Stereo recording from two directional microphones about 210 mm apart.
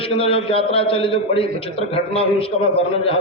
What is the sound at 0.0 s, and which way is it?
A man's voice, 25° left (ahead or behind).